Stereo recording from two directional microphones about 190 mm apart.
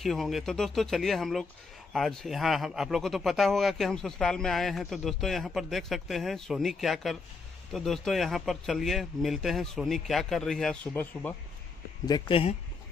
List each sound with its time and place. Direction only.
0.0 s speech: centre (ahead or behind)
12.1 s speech: 30° left (ahead or behind)